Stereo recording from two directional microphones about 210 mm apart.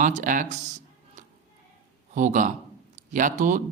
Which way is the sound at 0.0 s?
35° right (ahead or behind).